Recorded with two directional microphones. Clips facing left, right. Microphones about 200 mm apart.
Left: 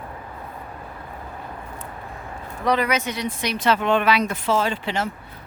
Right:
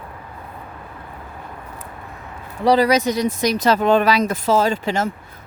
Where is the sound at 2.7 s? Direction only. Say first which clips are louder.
Right 7 dB; 35° right (ahead or behind).